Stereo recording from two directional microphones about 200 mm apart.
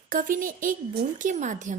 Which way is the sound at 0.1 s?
40° right (ahead or behind).